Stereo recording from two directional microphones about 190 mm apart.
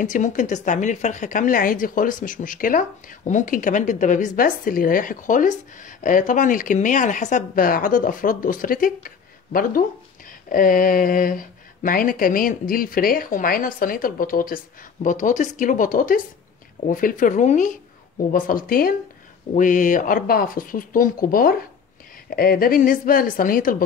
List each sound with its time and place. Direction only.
0.0 s a woman's voice: 40° left (ahead or behind)